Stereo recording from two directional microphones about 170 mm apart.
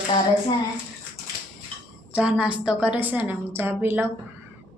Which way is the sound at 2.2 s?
5° right (ahead or behind).